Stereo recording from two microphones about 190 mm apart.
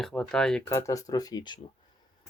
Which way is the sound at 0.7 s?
15° left (ahead or behind).